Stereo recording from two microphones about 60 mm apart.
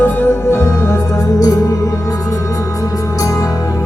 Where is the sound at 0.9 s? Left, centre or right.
Left.